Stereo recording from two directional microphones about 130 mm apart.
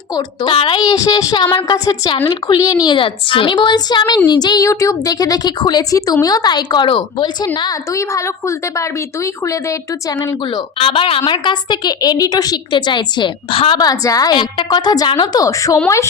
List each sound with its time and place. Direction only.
0.2 s a woman's voice: 40° left (ahead or behind); by 9.7 s 25° left (ahead or behind)
10.2 s speech: 40° left (ahead or behind)
13.7 s a woman's voice: 30° left (ahead or behind)